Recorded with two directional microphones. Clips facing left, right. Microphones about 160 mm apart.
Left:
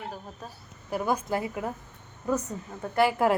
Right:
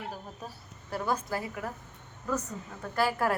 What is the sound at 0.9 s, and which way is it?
Speech, 15° left (ahead or behind).